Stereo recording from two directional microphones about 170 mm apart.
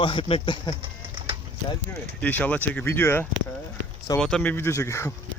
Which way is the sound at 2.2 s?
10° left (ahead or behind).